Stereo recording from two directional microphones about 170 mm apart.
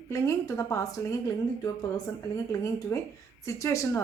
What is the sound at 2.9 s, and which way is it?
A woman's voice, 15° left (ahead or behind).